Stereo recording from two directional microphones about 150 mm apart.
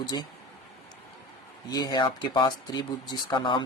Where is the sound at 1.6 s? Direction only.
25° left (ahead or behind).